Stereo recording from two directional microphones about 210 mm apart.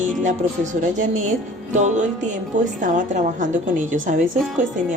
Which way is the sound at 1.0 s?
35° right (ahead or behind).